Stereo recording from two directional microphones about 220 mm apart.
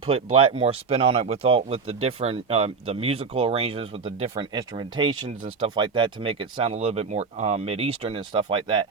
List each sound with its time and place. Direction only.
0.0 s speech: 25° right (ahead or behind)